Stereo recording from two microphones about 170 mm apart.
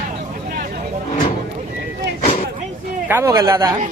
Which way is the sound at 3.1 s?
15° right (ahead or behind).